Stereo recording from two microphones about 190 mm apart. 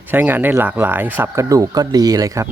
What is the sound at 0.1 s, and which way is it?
Speech, 10° right (ahead or behind).